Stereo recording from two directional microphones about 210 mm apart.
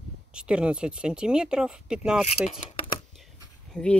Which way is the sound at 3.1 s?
Centre (ahead or behind).